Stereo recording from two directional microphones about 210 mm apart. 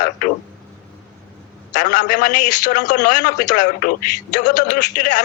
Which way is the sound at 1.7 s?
35° left (ahead or behind).